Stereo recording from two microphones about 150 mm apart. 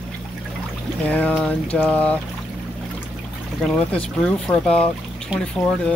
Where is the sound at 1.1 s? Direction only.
10° left (ahead or behind).